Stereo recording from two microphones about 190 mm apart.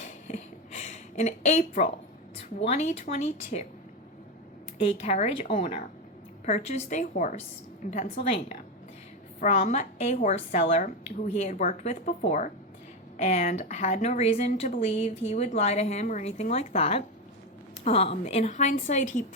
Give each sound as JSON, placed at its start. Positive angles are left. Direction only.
{"t": 0.3, "sound": "a sound", "side_deg": 40}
{"t": 2.4, "sound": "a woman's voice", "side_deg": 35}
{"t": 4.8, "sound": "a woman's voice", "side_deg": 35}